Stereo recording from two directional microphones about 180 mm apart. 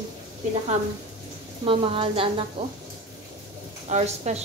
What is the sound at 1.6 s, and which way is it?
Speech, 30° right (ahead or behind).